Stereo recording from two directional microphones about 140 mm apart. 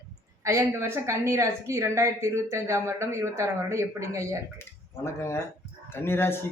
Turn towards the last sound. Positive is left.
turn(degrees=15)  # may be behind; listen again after turning